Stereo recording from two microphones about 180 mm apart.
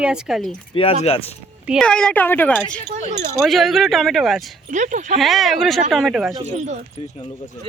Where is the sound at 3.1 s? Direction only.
40° right (ahead or behind).